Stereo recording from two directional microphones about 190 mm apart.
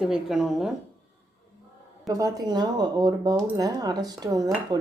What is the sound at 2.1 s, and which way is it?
Speech, 20° right (ahead or behind).